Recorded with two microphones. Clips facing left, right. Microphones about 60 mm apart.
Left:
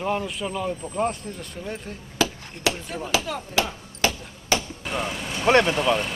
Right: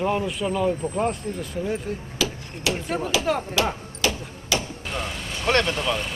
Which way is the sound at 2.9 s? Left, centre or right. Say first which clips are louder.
Right 5 dB; right.